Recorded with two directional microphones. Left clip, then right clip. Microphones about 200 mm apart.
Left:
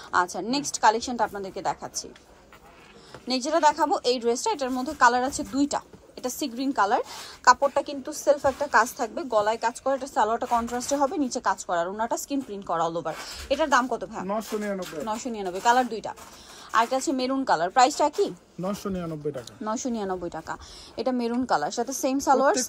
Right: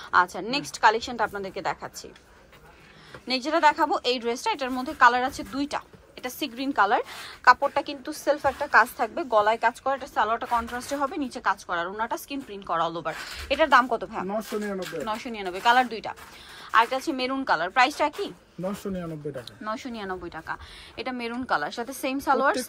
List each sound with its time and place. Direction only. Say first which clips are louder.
0.1 s a woman's voice: right 2 dB; 15° left (ahead or behind)
3.3 s a woman's voice: even; 15° left (ahead or behind)
15.0 s a woman's voice: left 1 dB; 20° left (ahead or behind)
18.7 s speech: left 2 dB; centre (ahead or behind)
19.6 s a woman's voice: left 4 dB; 25° left (ahead or behind)